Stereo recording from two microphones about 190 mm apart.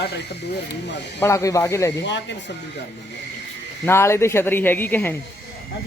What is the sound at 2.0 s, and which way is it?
Speech, 70° left (ahead or behind).